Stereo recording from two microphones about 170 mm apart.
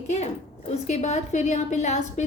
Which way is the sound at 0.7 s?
40° left (ahead or behind).